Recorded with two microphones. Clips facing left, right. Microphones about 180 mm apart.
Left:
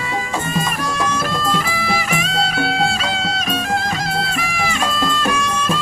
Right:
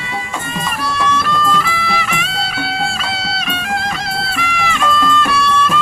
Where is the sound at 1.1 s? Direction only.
40° left (ahead or behind).